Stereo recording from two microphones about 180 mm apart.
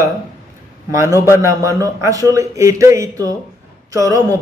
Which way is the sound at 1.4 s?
15° right (ahead or behind).